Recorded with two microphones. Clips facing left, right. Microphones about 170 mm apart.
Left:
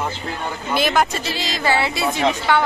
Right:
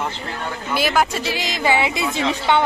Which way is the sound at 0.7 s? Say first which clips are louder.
Left 1 dB; 5° right (ahead or behind).